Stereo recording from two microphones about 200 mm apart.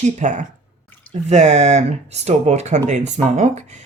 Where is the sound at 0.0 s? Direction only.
35° right (ahead or behind).